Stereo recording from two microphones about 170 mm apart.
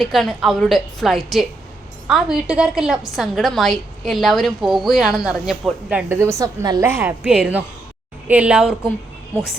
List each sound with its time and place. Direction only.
0.0 s a woman's voice: centre (ahead or behind)